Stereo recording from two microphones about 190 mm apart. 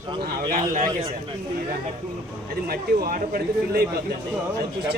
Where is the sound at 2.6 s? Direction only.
50° right (ahead or behind).